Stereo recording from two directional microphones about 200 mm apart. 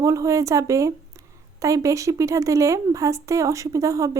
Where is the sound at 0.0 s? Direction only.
15° right (ahead or behind).